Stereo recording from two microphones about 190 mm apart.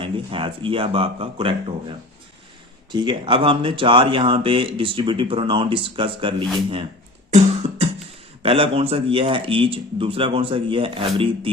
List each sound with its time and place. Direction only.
0.0 s speech: 25° right (ahead or behind)
2.9 s speech: 25° right (ahead or behind)
7.3 s music: 35° right (ahead or behind)
8.4 s speech: 30° right (ahead or behind)